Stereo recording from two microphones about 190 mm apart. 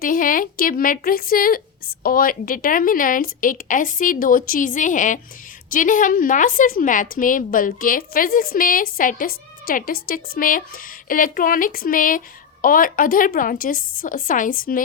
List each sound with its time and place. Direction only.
0.0 s a woman's voice: 45° left (ahead or behind)